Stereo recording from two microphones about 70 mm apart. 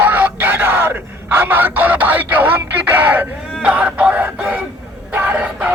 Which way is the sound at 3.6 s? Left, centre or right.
Centre.